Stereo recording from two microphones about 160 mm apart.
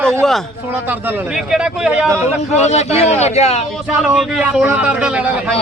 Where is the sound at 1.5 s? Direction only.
5° right (ahead or behind).